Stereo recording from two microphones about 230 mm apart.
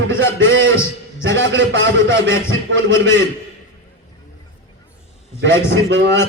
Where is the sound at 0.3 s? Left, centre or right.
Right.